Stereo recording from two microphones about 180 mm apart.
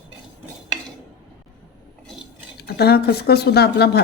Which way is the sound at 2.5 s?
60° left (ahead or behind).